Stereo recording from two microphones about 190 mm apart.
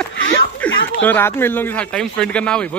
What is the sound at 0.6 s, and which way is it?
Chuckle, 5° left (ahead or behind).